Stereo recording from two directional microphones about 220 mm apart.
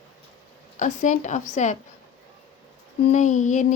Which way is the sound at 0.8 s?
35° left (ahead or behind).